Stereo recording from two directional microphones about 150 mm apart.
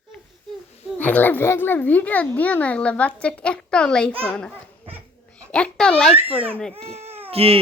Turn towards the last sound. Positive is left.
turn(degrees=-40)  # may be behind; listen again after turning